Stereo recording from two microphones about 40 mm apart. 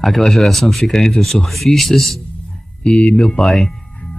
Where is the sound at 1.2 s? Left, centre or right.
Centre.